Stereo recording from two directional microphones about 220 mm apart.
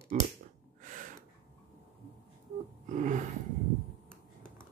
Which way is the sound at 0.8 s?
35° right (ahead or behind).